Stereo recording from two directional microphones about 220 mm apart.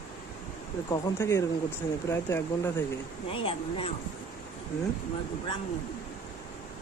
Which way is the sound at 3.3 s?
25° left (ahead or behind).